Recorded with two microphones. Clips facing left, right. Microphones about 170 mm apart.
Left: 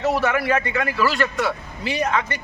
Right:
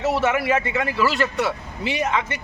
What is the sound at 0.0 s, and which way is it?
A man's voice, 25° right (ahead or behind).